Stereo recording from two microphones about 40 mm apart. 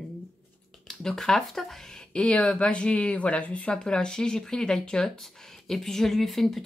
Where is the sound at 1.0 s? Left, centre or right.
Centre.